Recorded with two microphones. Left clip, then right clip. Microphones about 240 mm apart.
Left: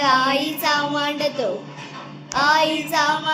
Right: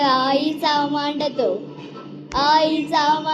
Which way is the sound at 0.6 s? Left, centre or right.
Centre.